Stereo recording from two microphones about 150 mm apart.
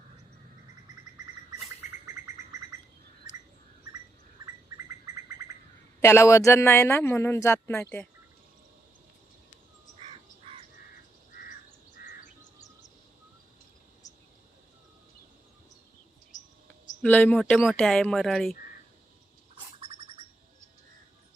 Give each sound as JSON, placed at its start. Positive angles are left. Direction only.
{"t": 2.1, "sound": "bird", "side_deg": -20}
{"t": 6.0, "sound": "speech", "side_deg": 20}
{"t": 10.0, "sound": "crow", "side_deg": -40}
{"t": 12.0, "sound": "insect", "side_deg": 80}
{"t": 16.3, "sound": "cricket", "side_deg": 55}
{"t": 17.0, "sound": "speech", "side_deg": 10}
{"t": 19.8, "sound": "bird", "side_deg": -40}